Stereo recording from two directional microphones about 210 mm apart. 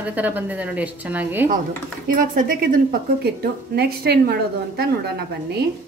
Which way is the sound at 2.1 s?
40° right (ahead or behind).